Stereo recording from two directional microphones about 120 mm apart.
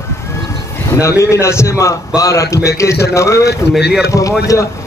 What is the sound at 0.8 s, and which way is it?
A man's voice, 25° left (ahead or behind).